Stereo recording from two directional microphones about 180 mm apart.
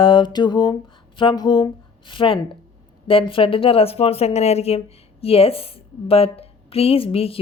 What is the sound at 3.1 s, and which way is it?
A woman's voice, 30° left (ahead or behind).